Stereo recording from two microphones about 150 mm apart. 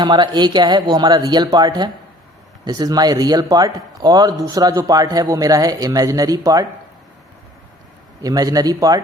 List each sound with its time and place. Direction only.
0.0 s speech: 30° right (ahead or behind)
8.2 s speech: 25° right (ahead or behind)